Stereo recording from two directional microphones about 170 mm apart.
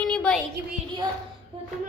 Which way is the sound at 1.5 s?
30° right (ahead or behind).